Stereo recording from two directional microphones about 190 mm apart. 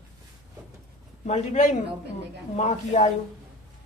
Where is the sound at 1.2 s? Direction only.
40° left (ahead or behind).